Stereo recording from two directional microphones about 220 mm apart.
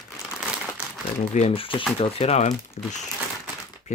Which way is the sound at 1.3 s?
25° left (ahead or behind).